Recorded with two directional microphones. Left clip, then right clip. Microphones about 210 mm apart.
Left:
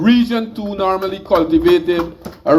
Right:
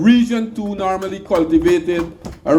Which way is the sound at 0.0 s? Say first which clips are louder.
Even; 65° right (ahead or behind).